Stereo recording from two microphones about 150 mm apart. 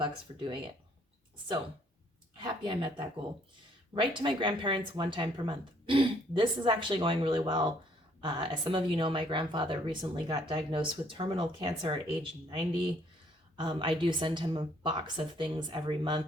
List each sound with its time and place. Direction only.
0.0 s speech: 35° right (ahead or behind)
2.4 s speech: 30° right (ahead or behind)
3.9 s speech: 35° right (ahead or behind)